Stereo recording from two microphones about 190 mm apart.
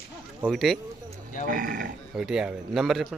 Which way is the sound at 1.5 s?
45° right (ahead or behind).